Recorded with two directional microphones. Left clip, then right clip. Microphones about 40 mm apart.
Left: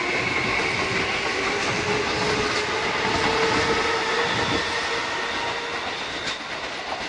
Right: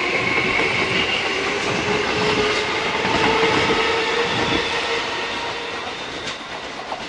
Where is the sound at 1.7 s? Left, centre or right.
Right.